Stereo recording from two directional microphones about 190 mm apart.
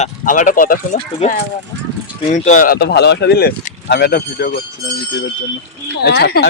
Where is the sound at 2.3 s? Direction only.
40° left (ahead or behind); by 4.5 s 55° left (ahead or behind).